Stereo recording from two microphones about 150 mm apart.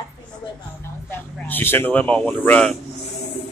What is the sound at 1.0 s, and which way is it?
Speech, 15° left (ahead or behind).